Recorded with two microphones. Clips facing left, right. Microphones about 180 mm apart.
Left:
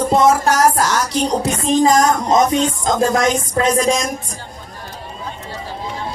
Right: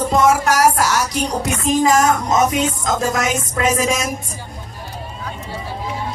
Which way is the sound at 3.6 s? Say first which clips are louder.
Left 2 dB; 5° right (ahead or behind).